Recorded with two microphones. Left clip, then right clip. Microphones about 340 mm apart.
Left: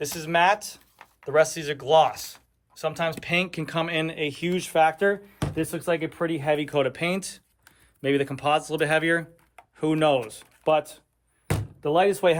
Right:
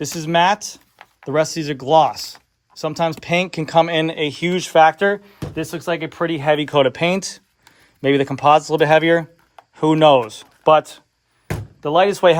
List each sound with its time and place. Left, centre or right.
0.0 s speech: right